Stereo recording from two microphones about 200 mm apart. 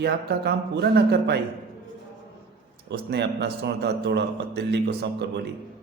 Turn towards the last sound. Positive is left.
turn(degrees=-55)  # may be behind; listen again after turning